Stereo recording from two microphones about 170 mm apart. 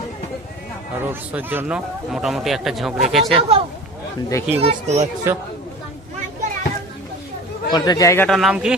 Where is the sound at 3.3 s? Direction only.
30° right (ahead or behind).